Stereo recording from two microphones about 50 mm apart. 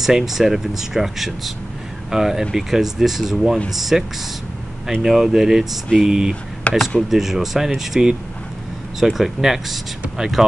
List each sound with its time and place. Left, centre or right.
0.0 s speech: centre
5.0 s speech: centre
6.7 s speech: left
7.0 s speech: centre